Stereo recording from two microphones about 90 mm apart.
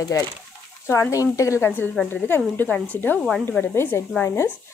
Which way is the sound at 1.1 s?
35° left (ahead or behind).